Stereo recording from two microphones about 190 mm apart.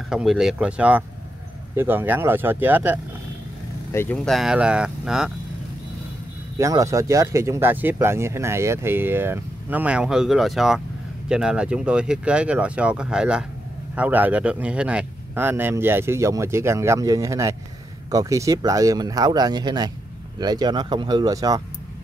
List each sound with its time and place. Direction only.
0.1 s speech: 5° right (ahead or behind)
3.9 s speech: 10° left (ahead or behind)
6.6 s speech: 15° right (ahead or behind)